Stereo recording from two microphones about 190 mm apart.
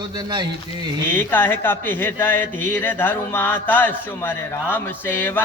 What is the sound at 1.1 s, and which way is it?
Speech, 10° left (ahead or behind).